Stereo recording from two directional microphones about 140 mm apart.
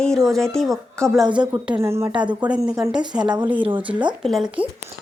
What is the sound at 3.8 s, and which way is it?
Speech, 10° right (ahead or behind).